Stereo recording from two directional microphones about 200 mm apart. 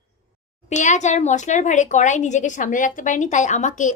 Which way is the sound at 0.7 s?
35° left (ahead or behind).